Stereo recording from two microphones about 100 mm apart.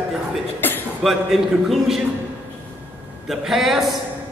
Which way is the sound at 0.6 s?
20° left (ahead or behind).